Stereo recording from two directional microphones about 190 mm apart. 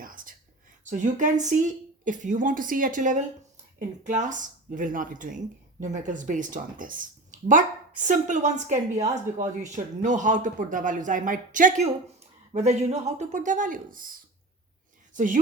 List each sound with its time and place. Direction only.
0.0 s whispering: 45° right (ahead or behind)
0.9 s a woman's voice: 40° right (ahead or behind)
15.1 s speech: 45° right (ahead or behind)